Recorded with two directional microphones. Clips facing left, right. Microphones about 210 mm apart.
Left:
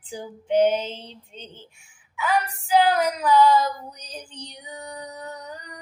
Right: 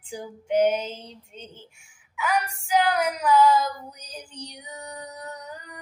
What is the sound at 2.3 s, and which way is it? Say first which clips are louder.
Female singing: left 2 dB; 35° left (ahead or behind).